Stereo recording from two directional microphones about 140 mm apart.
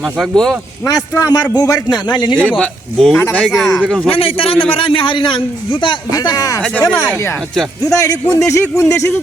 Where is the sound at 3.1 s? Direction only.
15° left (ahead or behind).